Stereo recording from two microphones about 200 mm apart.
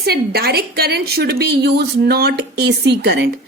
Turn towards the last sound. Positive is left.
turn(degrees=-55)  # may be behind; listen again after turning